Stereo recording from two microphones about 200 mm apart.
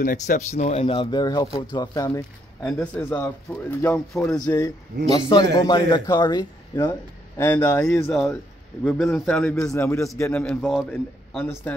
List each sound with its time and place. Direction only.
0.0 s speech: 40° left (ahead or behind); by 4.6 s 10° left (ahead or behind)
5.5 s speech: 20° left (ahead or behind)